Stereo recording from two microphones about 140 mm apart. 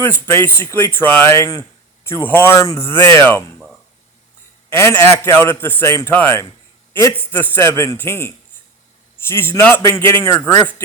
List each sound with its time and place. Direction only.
0.0 s speech: 15° left (ahead or behind)
4.8 s speech: 20° left (ahead or behind)